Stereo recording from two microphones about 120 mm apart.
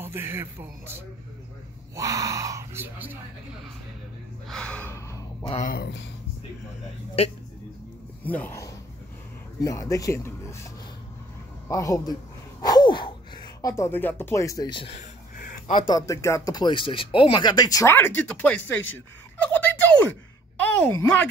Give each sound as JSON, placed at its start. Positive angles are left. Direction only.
{"t": 0.0, "sound": "speech", "side_deg": -20}
{"t": 2.0, "sound": "speech", "side_deg": -25}
{"t": 4.5, "sound": "gasp", "side_deg": 10}
{"t": 4.9, "sound": "gasp", "side_deg": 25}
{"t": 8.2, "sound": "speech", "side_deg": 15}
{"t": 9.6, "sound": "speech", "side_deg": 25}
{"t": 11.6, "sound": "a man's voice", "side_deg": 25}
{"t": 12.6, "sound": "gasp", "side_deg": 35}
{"t": 14.7, "sound": "speech", "side_deg": 45}
{"t": 15.9, "sound": "speech", "side_deg": 25}